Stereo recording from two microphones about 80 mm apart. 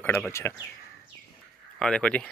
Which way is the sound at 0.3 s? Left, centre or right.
Left.